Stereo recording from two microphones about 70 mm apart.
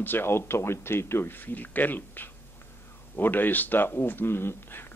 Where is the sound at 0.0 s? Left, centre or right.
Left.